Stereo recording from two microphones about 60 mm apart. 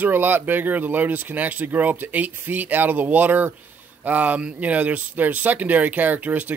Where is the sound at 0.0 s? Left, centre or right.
Right.